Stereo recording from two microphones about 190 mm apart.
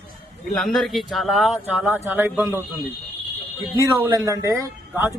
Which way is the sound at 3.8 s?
20° right (ahead or behind).